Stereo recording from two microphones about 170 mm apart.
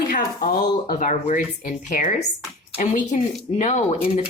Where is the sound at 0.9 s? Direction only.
45° left (ahead or behind).